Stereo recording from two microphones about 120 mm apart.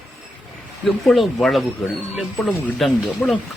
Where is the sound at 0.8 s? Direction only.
Centre (ahead or behind).